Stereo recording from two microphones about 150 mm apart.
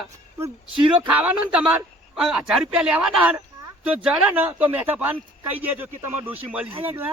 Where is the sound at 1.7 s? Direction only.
5° right (ahead or behind).